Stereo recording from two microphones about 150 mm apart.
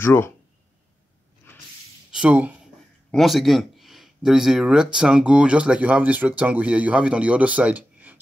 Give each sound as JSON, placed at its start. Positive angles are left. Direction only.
{"t": 0.0, "sound": "speech", "side_deg": 15}
{"t": 2.0, "sound": "a sound", "side_deg": -5}
{"t": 3.1, "sound": "speech", "side_deg": 0}